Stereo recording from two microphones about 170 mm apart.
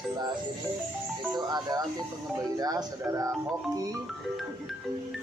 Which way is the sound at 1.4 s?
25° right (ahead or behind).